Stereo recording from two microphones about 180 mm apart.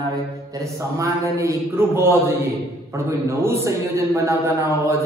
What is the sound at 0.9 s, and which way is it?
Mantra, 15° right (ahead or behind).